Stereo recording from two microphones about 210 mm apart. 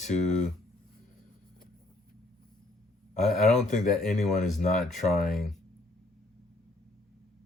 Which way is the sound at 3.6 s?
35° left (ahead or behind).